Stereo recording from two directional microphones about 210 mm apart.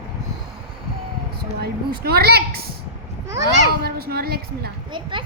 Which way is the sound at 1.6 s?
50° right (ahead or behind).